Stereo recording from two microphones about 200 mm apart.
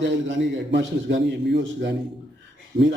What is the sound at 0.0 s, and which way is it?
A man's voice, 65° right (ahead or behind).